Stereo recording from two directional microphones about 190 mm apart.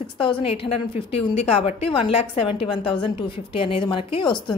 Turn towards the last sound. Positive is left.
turn(degrees=25)  # may be behind; listen again after turning